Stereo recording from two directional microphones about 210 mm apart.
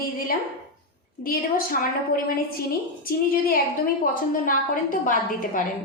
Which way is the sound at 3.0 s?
45° left (ahead or behind).